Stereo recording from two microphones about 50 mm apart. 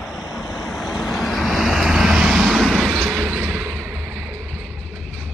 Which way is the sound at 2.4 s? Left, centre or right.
Centre.